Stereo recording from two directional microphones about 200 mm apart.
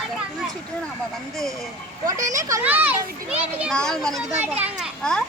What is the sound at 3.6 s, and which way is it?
A child's voice, centre (ahead or behind).